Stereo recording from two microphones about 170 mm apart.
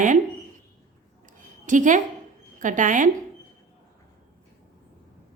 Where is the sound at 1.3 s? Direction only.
50° right (ahead or behind).